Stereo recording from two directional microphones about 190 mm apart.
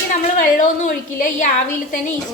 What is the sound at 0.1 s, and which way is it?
A woman's voice, 45° left (ahead or behind).